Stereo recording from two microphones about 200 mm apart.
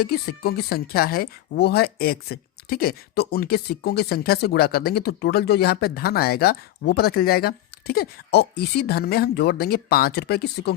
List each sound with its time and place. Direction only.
0.0 s speech: 50° left (ahead or behind)